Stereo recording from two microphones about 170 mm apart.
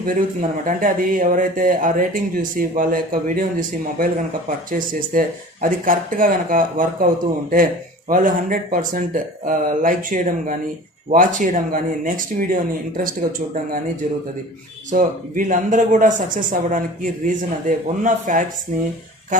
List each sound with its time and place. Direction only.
0.6 s speech: 55° right (ahead or behind)
14.8 s speech: 50° right (ahead or behind)